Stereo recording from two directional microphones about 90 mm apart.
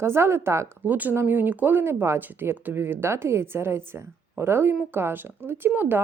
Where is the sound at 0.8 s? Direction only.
20° right (ahead or behind).